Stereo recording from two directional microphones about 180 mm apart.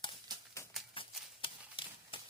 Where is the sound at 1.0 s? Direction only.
30° left (ahead or behind).